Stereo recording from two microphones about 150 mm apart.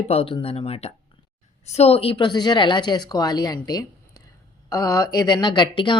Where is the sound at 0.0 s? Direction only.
40° left (ahead or behind).